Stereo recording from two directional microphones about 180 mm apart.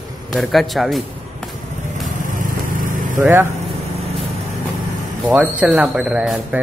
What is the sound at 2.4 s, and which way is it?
Vehicle, 50° right (ahead or behind).